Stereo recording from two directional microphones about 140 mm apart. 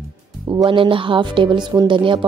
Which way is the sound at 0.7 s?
40° right (ahead or behind).